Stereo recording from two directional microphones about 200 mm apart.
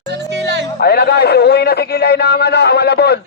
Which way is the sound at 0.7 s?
50° left (ahead or behind).